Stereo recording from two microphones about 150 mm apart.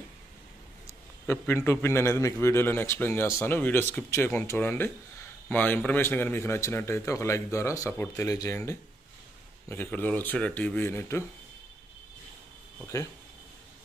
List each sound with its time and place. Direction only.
0.8 s a man's voice: 15° left (ahead or behind)
9.7 s a man's voice: 15° left (ahead or behind)
12.8 s speech: 20° left (ahead or behind)